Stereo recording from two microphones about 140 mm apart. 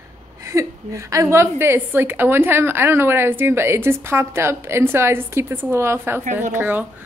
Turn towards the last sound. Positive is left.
turn(degrees=-10)  # may be behind; listen again after turning